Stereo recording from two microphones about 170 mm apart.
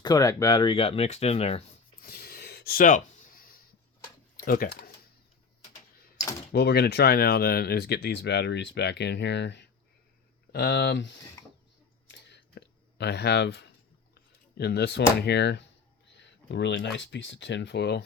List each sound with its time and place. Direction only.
0.0 s speech: 20° left (ahead or behind); by 1.6 s 35° left (ahead or behind)
2.0 s a sound: 60° left (ahead or behind)
4.4 s speech: 60° left (ahead or behind)
6.5 s speech: 70° left (ahead or behind); by 9.6 s 90° left
10.5 s speech: 75° left (ahead or behind)
12.0 s a sound: 90° left
14.5 s speech: 70° left (ahead or behind)